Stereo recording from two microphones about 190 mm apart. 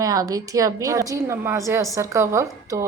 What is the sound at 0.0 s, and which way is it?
A woman's voice, 20° right (ahead or behind).